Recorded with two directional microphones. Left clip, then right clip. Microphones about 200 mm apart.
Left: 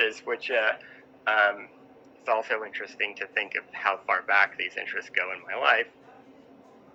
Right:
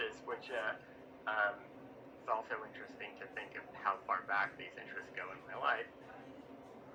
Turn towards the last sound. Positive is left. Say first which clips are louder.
# left 14 dB
turn(degrees=45)  # may be behind; listen again after turning